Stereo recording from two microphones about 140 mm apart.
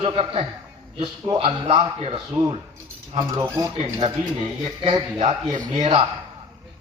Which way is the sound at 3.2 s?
20° right (ahead or behind).